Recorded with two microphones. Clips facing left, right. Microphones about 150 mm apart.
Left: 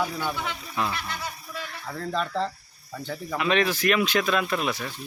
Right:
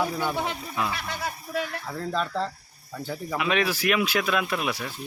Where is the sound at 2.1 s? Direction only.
Centre (ahead or behind).